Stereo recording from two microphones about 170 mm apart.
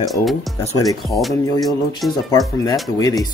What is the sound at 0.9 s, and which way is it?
Speech, centre (ahead or behind).